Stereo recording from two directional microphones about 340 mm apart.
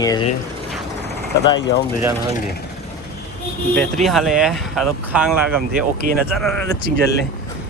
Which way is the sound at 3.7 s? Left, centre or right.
Centre.